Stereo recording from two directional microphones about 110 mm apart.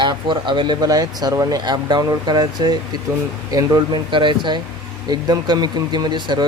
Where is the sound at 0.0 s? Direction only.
45° right (ahead or behind).